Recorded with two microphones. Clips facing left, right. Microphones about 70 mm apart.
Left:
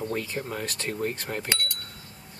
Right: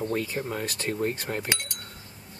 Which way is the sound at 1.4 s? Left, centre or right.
Centre.